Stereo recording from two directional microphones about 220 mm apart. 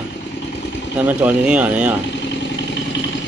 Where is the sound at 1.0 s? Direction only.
5° right (ahead or behind).